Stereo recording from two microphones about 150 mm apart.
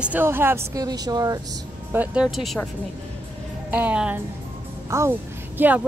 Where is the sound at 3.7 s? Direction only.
10° right (ahead or behind).